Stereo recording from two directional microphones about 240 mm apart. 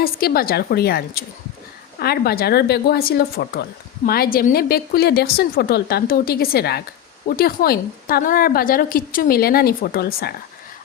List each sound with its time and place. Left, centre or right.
0.0 s speech: left